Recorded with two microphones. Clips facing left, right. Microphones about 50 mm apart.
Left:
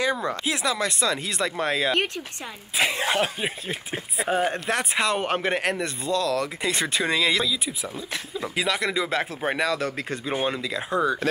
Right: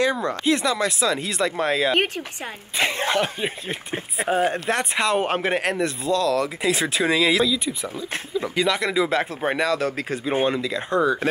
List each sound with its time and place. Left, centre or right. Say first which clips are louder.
0.0 s speech: right 3 dB; centre
2.8 s throat clearing: right 1 dB; right
3.1 s speech: right 2 dB; centre
4.3 s speech: right 3 dB; centre